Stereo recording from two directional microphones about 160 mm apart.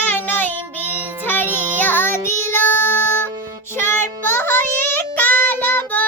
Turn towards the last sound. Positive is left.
turn(degrees=10)  # may be behind; listen again after turning